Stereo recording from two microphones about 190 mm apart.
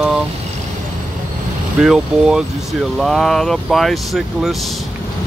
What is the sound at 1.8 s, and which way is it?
Speech, 5° right (ahead or behind).